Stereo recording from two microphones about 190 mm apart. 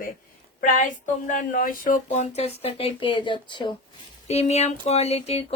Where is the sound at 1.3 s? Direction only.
45° left (ahead or behind).